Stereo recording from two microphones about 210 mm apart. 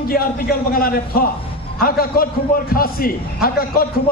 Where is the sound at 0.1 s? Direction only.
45° left (ahead or behind).